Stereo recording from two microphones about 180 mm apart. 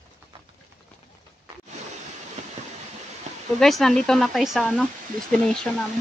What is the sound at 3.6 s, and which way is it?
Speech, centre (ahead or behind).